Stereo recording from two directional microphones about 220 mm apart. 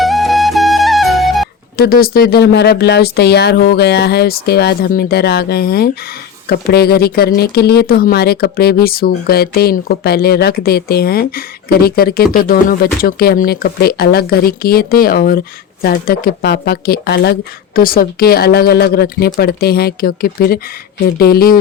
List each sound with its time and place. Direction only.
0.0 s music: centre (ahead or behind)
1.7 s speech: 45° left (ahead or behind)